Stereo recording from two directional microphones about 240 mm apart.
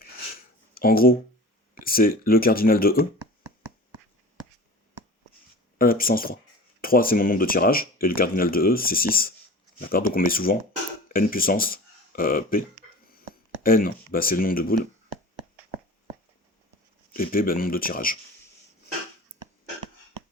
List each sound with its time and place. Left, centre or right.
0.7 s speech: left
5.7 s speech: left
17.2 s speech: left